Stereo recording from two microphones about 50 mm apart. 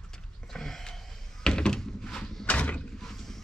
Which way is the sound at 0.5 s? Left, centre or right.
Centre.